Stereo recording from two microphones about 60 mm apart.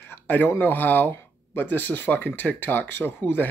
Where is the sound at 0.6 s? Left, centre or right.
Left.